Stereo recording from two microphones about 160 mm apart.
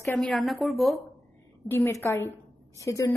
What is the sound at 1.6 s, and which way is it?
A woman's voice, 15° left (ahead or behind).